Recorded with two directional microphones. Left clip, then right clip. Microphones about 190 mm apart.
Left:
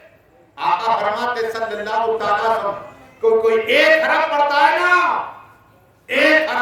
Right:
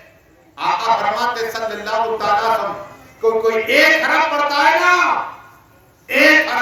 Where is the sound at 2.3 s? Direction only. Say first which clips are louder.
Right 4 dB; 25° left (ahead or behind).